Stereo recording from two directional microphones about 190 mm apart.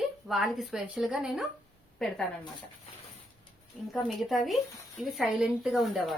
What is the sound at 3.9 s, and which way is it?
Speech, centre (ahead or behind).